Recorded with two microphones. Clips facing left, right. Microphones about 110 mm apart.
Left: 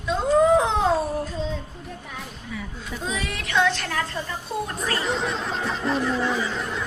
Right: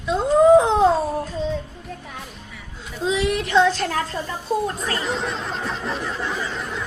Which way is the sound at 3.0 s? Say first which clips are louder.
Right 10 dB; 20° right (ahead or behind).